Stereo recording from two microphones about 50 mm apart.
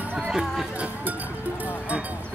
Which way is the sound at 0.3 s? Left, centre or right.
Centre.